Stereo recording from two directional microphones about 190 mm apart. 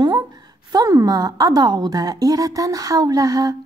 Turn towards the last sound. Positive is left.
turn(degrees=-20)  # may be behind; listen again after turning